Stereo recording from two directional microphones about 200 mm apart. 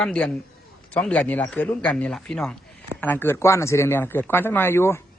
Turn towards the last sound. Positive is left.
turn(degrees=15)  # may be behind; listen again after turning